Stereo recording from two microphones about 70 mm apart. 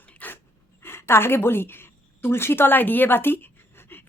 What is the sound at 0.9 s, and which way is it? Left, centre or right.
A woman's voice, left.